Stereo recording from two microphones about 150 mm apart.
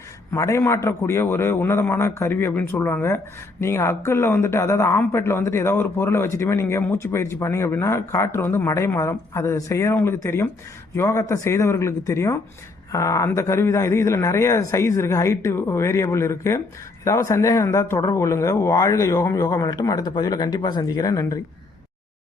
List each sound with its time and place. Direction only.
0.3 s a man's voice: 20° left (ahead or behind)